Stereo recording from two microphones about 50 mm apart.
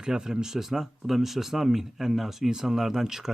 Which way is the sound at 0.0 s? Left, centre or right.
Centre.